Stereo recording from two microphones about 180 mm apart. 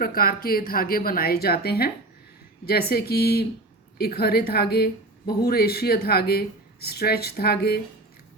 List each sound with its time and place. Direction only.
0.0 s speech: 55° left (ahead or behind)